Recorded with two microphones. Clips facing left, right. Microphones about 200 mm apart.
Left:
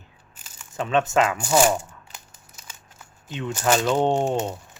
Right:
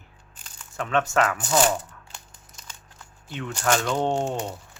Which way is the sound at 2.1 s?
5° left (ahead or behind).